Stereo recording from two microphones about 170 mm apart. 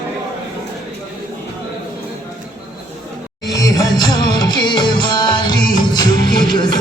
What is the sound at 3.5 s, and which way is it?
Music, 20° left (ahead or behind).